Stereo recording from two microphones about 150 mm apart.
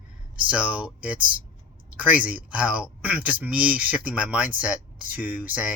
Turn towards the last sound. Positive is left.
turn(degrees=-10)  # may be behind; listen again after turning